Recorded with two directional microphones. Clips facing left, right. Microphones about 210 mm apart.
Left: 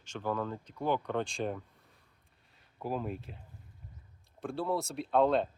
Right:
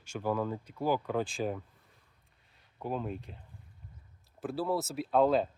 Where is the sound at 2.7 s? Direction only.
Centre (ahead or behind).